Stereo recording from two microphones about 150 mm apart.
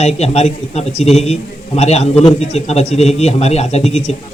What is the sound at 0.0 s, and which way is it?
A man's voice, 45° left (ahead or behind).